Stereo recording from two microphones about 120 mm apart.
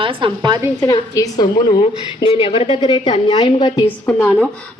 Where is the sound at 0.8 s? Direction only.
30° left (ahead or behind).